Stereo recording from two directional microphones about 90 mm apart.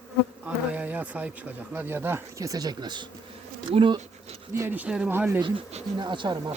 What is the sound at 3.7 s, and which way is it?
Speech, 65° right (ahead or behind).